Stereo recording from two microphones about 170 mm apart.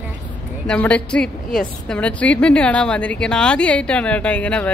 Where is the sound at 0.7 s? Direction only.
5° left (ahead or behind).